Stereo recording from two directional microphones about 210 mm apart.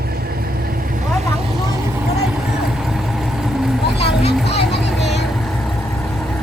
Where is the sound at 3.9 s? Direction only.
30° left (ahead or behind).